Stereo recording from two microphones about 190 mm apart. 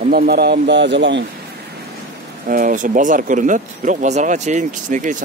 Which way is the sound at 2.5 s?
45° right (ahead or behind).